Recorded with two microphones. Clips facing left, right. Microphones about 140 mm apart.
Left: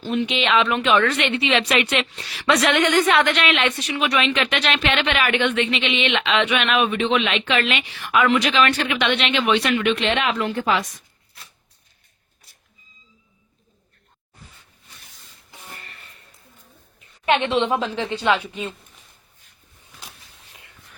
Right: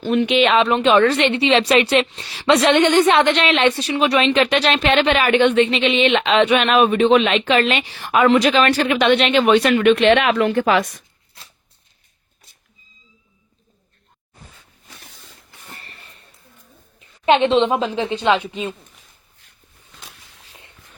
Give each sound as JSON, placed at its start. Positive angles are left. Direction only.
{"t": 0.0, "sound": "speech", "side_deg": -60}
{"t": 0.4, "sound": "a woman's voice", "side_deg": -35}
{"t": 15.7, "sound": "a sound", "side_deg": -35}
{"t": 17.0, "sound": "a woman's voice", "side_deg": -25}